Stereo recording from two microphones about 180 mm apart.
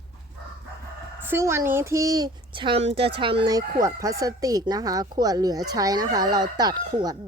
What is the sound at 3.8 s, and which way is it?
Speech, 20° right (ahead or behind).